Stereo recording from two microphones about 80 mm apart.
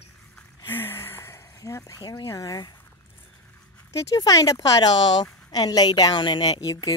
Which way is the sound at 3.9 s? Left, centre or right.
Left.